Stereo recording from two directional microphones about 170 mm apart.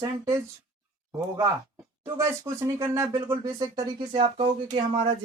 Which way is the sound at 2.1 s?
15° right (ahead or behind).